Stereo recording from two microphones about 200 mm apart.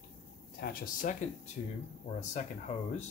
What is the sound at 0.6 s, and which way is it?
Speech, 40° left (ahead or behind).